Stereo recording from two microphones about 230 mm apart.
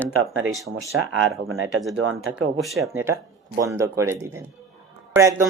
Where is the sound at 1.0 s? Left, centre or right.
Right.